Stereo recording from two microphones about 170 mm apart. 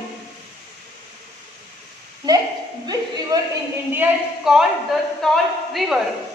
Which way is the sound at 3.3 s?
20° right (ahead or behind).